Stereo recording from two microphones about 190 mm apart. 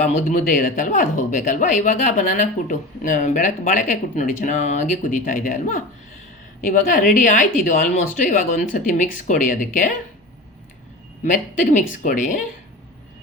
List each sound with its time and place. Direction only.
0.0 s speech: 45° left (ahead or behind)
11.2 s speech: 40° left (ahead or behind)